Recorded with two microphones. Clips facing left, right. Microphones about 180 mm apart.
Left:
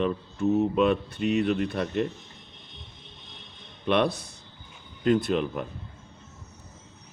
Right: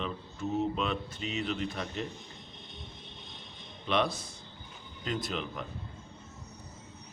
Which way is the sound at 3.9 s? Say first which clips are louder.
Left 6 dB; 60° left (ahead or behind).